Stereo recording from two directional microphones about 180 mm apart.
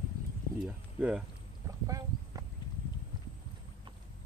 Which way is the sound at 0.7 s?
5° right (ahead or behind).